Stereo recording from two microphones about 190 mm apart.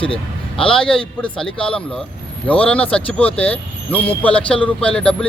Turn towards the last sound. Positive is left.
turn(degrees=5)  # may be behind; listen again after turning